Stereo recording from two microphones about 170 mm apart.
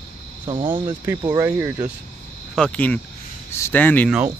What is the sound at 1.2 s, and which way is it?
Speech, 15° right (ahead or behind).